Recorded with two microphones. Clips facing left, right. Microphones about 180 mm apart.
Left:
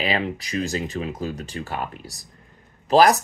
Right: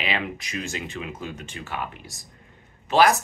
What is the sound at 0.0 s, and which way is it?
Speech, 35° left (ahead or behind).